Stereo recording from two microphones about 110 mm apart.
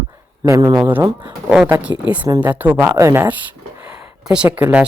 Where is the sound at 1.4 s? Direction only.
5° right (ahead or behind).